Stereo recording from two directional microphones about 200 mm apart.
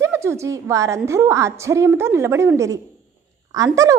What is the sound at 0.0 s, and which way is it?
A woman's voice, 15° right (ahead or behind).